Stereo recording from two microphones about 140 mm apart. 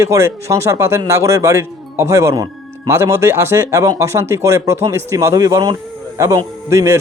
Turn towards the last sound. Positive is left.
turn(degrees=-20)  # may be behind; listen again after turning